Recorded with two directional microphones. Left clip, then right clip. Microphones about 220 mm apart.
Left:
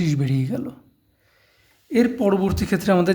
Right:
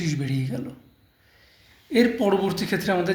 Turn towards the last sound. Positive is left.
turn(degrees=40)  # may be behind; listen again after turning